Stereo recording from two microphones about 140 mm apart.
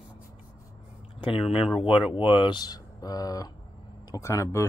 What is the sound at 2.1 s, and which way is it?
Speech, 40° left (ahead or behind).